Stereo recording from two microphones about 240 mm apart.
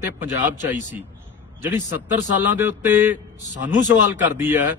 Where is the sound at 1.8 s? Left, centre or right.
Centre.